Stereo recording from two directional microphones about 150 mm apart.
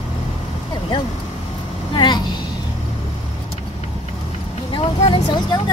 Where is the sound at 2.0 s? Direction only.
30° left (ahead or behind).